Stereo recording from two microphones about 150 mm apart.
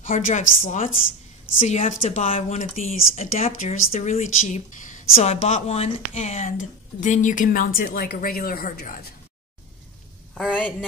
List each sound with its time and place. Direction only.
0.0 s speech: 55° left (ahead or behind)
5.1 s a woman's voice: 45° left (ahead or behind); by 9.1 s 75° left (ahead or behind)
10.3 s speech: 5° left (ahead or behind)